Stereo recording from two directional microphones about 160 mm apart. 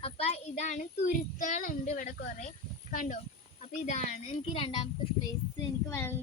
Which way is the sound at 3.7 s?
45° left (ahead or behind).